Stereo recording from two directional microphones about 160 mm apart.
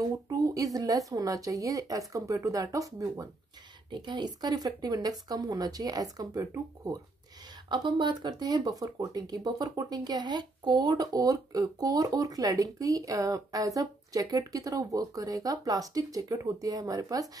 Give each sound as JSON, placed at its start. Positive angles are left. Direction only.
{"t": 0.0, "sound": "speech", "side_deg": -20}